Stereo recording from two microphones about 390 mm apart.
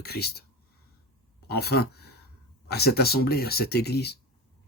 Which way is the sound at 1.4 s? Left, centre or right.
Left.